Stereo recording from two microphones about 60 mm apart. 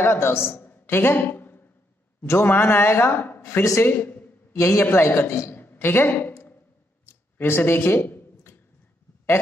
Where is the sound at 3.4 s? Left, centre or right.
Left.